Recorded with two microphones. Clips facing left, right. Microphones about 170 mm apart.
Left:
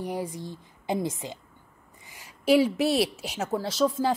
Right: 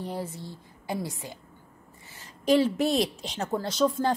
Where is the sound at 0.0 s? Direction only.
15° left (ahead or behind).